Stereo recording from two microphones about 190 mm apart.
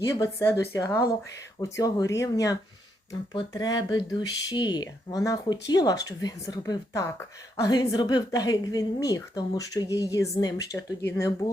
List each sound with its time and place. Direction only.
0.1 s a woman's voice: 15° left (ahead or behind)